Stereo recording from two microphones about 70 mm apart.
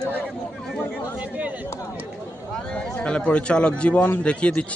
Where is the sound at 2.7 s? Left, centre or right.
Centre.